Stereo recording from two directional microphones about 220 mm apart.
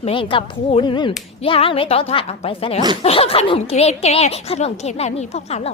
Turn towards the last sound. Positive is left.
turn(degrees=30)  # may be behind; listen again after turning